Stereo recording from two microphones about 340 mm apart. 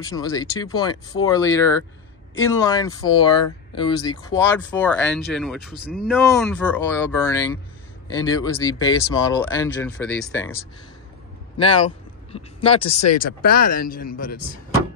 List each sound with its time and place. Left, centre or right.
0.0 s speech: centre